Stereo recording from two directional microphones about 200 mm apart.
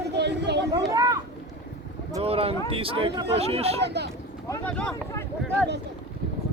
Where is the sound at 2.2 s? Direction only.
30° right (ahead or behind).